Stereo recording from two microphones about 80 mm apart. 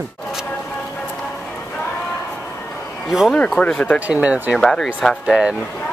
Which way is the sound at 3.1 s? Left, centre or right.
Centre.